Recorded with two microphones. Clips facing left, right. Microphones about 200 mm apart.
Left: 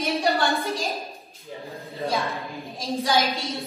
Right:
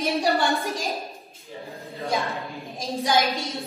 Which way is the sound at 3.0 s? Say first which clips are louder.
Right 1 dB; 15° right (ahead or behind).